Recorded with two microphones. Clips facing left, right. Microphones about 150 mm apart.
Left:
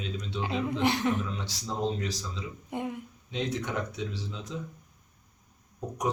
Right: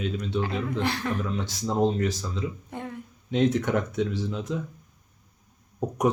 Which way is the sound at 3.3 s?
50° right (ahead or behind).